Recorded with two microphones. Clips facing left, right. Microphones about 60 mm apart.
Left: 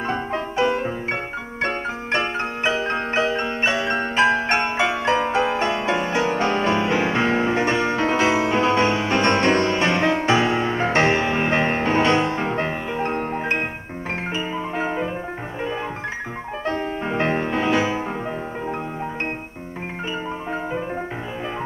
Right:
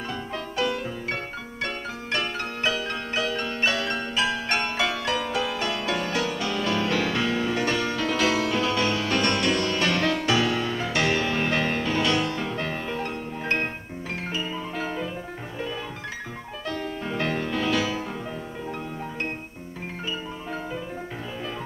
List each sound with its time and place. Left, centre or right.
0.1 s music: left
14.3 s music: left
16.6 s music: left